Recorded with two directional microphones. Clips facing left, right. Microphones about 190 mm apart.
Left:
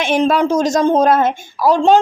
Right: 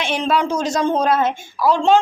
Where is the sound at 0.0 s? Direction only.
45° left (ahead or behind).